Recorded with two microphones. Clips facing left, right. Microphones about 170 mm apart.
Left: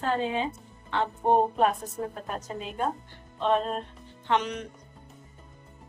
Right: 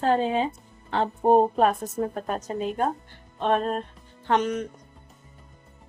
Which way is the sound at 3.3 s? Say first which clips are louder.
Right 2 dB; 50° right (ahead or behind).